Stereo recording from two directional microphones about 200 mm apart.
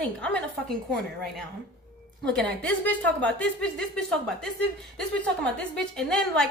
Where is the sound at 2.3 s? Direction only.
5° left (ahead or behind).